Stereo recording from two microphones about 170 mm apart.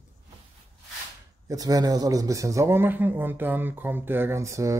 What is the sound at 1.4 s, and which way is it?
A man's voice, 20° right (ahead or behind).